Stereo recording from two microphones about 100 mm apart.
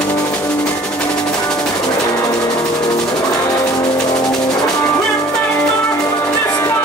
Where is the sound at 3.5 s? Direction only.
35° left (ahead or behind).